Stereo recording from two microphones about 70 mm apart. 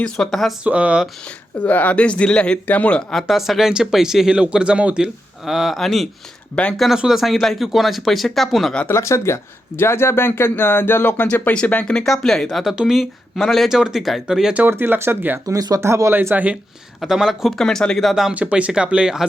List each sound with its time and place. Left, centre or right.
0.0 s speech: centre
0.6 s speech: centre
1.5 s speech: left
3.1 s speech: centre
8.9 s speech: left; by 14.5 s centre
14.7 s speech: right
15.4 s speech: right
15.8 s speech: right
16.3 s speech: right
17.0 s speech: centre
17.6 s speech: centre
18.1 s speech: centre
18.3 s speech: centre